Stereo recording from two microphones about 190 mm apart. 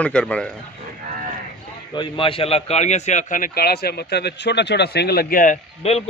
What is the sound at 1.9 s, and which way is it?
A man's voice, 25° left (ahead or behind).